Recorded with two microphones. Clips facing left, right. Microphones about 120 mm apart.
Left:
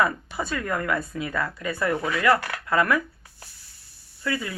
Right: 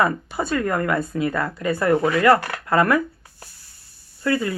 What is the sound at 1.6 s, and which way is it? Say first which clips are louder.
Speech: right 9 dB; 45° right (ahead or behind).